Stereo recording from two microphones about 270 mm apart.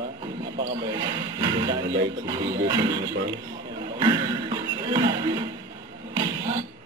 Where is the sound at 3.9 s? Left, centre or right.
Centre.